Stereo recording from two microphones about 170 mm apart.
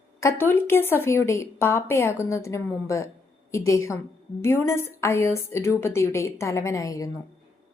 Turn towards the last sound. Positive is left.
turn(degrees=20)  # may be behind; listen again after turning